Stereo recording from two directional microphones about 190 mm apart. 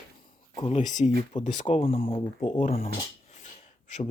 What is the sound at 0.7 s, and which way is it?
Speech, 40° left (ahead or behind).